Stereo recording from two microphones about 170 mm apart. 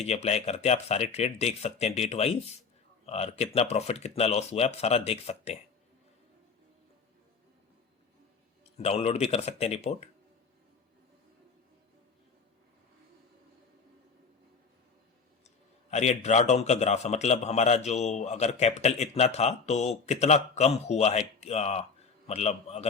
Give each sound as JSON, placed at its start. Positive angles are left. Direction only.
{"t": 0.0, "sound": "a man's voice", "side_deg": 40}
{"t": 8.8, "sound": "a man's voice", "side_deg": 40}
{"t": 15.9, "sound": "a man's voice", "side_deg": 40}